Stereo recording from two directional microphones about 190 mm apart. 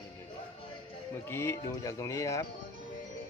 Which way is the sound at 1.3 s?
15° left (ahead or behind).